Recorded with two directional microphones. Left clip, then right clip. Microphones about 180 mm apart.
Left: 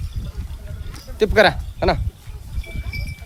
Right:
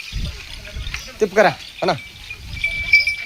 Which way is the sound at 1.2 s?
20° left (ahead or behind).